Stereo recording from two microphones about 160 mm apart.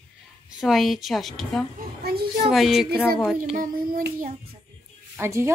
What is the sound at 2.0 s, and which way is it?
Speech, 75° right (ahead or behind).